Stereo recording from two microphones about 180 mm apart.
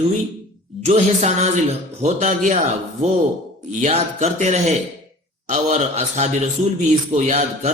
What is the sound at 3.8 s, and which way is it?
Speech, 35° right (ahead or behind).